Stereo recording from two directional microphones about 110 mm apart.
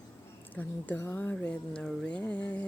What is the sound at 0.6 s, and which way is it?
Speech, 15° left (ahead or behind).